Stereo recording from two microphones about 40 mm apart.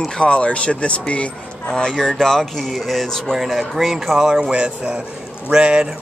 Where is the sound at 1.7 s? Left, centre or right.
Centre.